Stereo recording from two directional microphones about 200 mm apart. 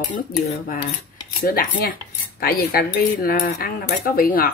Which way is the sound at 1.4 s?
50° left (ahead or behind).